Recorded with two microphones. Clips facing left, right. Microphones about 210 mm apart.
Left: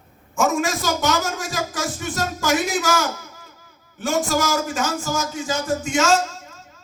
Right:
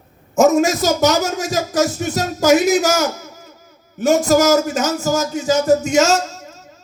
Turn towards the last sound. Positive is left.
turn(degrees=-40)  # may be behind; listen again after turning